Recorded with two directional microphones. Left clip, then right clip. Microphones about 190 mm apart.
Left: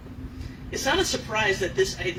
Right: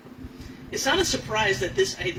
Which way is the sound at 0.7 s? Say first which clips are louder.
Right 1 dB; 50° right (ahead or behind).